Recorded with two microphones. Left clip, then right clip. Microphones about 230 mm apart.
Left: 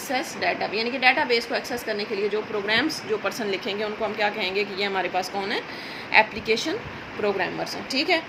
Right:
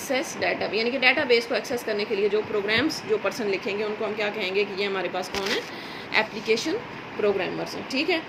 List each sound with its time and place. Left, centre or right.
0.1 s a woman's voice: left